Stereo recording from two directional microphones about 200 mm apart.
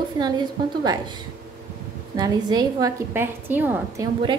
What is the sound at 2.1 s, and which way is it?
A woman's voice, 20° right (ahead or behind).